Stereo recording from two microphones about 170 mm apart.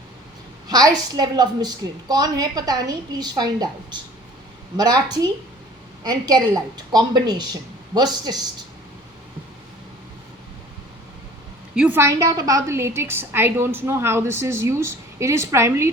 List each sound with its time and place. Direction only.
0.7 s a woman's voice: 20° right (ahead or behind)
4.8 s a woman's voice: 25° right (ahead or behind)
11.7 s a woman's voice: 10° right (ahead or behind)